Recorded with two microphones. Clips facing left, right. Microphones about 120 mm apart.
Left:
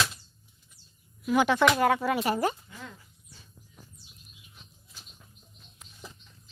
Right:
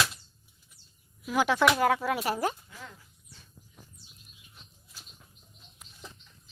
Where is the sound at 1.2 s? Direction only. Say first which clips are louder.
Left 2 dB; centre (ahead or behind).